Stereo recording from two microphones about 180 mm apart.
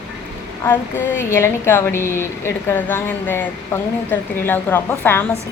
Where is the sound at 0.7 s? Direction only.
10° left (ahead or behind).